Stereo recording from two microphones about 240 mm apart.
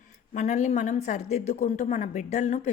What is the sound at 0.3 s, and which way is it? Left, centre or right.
A woman's voice, left.